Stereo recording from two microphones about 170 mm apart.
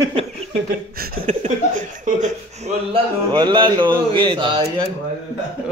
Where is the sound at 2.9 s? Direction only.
25° right (ahead or behind).